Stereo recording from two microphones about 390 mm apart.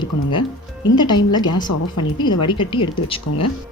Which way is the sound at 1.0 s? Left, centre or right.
Centre.